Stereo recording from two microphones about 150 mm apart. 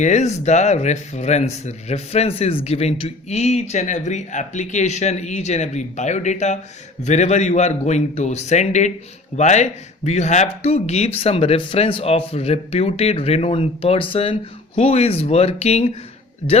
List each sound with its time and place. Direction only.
0.0 s speech: 50° left (ahead or behind)